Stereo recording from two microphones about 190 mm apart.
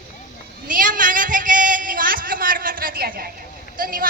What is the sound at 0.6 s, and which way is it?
A man's voice, 45° right (ahead or behind).